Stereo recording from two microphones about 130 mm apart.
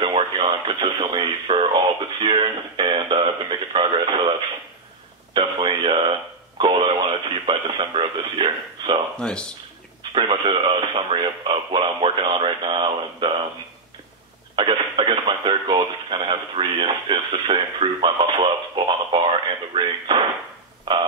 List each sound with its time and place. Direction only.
0.0 s speech: 40° right (ahead or behind)
2.8 s a sound: 40° right (ahead or behind)
3.9 s radio: 40° right (ahead or behind)
5.3 s radio: 40° right (ahead or behind)
9.1 s speech: 5° left (ahead or behind)
10.1 s radio: 40° right (ahead or behind)
14.5 s radio: 40° right (ahead or behind)
20.9 s a sound: 35° right (ahead or behind)